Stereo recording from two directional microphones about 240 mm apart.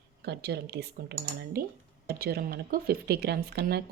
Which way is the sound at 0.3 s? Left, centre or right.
Right.